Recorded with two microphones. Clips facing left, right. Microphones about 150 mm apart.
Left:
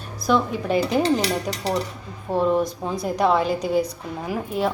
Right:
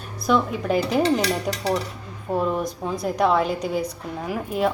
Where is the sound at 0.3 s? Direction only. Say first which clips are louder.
Even; centre (ahead or behind).